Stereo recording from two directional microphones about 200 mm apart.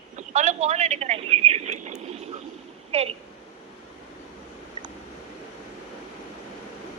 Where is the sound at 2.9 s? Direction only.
30° right (ahead or behind).